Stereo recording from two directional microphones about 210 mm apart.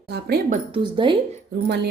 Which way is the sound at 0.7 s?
20° right (ahead or behind).